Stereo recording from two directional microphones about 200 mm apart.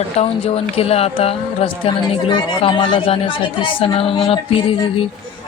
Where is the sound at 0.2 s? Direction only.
30° left (ahead or behind).